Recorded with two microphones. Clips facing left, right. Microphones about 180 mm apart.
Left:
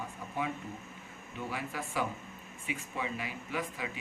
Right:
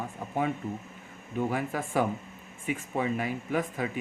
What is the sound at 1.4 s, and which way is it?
Speech, 50° right (ahead or behind).